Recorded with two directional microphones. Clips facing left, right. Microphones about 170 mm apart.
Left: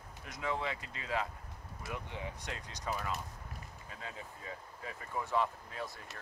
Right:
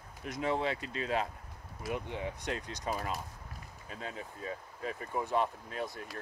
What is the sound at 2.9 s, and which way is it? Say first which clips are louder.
Speech: right 2 dB; 35° right (ahead or behind).